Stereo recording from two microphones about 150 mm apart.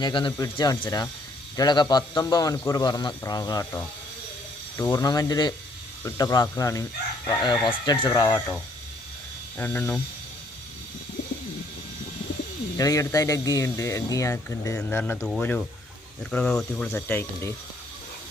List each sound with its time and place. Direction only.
0.0 s a man's voice: 30° left (ahead or behind)
4.8 s a man's voice: 20° left (ahead or behind)
9.6 s speech: 15° left (ahead or behind)
12.7 s a man's voice: 20° left (ahead or behind)